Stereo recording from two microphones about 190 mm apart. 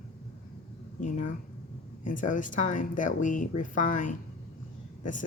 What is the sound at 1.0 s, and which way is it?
Speech, 45° left (ahead or behind).